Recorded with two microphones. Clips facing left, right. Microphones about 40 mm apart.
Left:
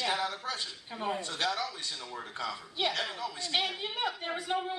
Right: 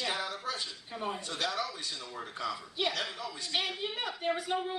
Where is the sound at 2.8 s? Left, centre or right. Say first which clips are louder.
Left 2 dB; left.